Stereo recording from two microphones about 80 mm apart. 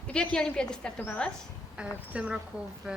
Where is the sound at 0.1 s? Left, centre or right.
Centre.